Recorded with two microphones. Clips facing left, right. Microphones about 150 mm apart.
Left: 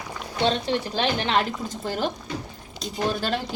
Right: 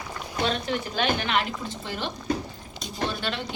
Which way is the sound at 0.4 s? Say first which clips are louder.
Left 4 dB; 30° left (ahead or behind).